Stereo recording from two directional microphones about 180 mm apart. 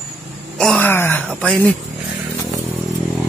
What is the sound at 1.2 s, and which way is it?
Speech, 5° left (ahead or behind).